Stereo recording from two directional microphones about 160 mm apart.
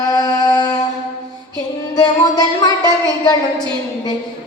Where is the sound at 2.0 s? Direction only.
25° left (ahead or behind).